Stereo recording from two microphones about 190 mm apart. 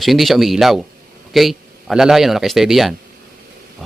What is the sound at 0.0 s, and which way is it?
Speech, centre (ahead or behind).